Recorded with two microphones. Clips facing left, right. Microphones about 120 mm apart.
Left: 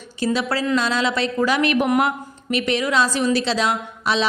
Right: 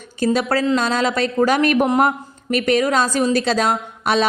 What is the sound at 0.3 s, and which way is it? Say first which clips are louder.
A woman's voice: right 2 dB; 45° right (ahead or behind).